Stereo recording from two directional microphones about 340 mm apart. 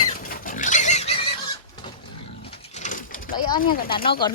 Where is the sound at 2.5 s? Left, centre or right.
Centre.